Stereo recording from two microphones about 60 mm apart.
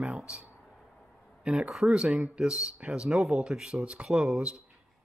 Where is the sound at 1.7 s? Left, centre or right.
Centre.